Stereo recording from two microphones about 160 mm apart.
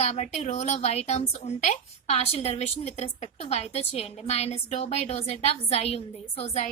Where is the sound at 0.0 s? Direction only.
40° left (ahead or behind).